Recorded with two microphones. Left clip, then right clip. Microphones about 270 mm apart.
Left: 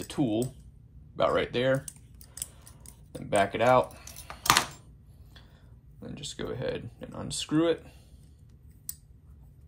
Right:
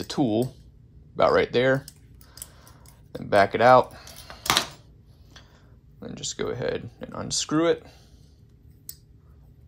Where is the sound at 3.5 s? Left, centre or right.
Centre.